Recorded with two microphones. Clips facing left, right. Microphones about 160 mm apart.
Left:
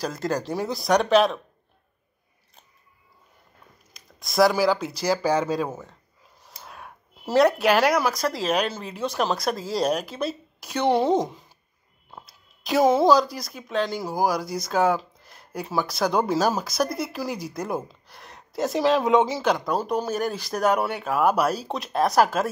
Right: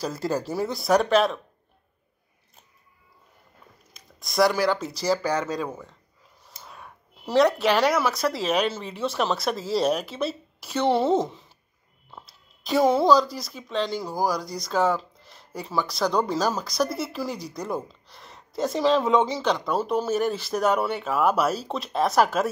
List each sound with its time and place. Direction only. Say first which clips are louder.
0.0 s speech: even; 5° right (ahead or behind)
4.2 s speech: left 2 dB; centre (ahead or behind)
7.2 s speech: left 1 dB; 5° left (ahead or behind)
12.1 s a sound: left 1 dB; 5° left (ahead or behind)
13.3 s speech: left 1 dB; centre (ahead or behind)
17.6 s speech: even; 20° left (ahead or behind)
18.1 s a sound: left 1 dB; centre (ahead or behind)
19.1 s speech: left 2 dB; 5° left (ahead or behind)